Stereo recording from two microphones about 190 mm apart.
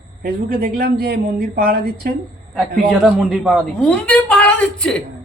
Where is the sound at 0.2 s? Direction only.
55° right (ahead or behind).